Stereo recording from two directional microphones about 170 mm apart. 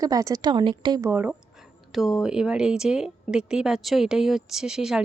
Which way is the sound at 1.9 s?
Centre (ahead or behind).